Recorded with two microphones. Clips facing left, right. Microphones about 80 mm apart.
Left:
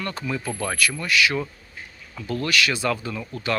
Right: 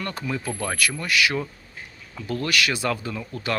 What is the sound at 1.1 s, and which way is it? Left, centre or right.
Speech, right.